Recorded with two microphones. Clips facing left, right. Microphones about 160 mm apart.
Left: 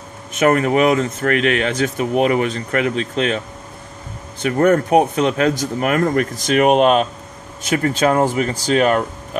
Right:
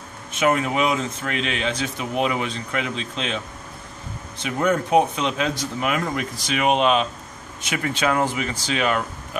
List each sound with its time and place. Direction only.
0.3 s speech: 50° left (ahead or behind)
4.4 s speech: 55° left (ahead or behind)